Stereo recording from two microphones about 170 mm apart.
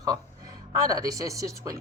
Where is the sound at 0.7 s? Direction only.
20° right (ahead or behind).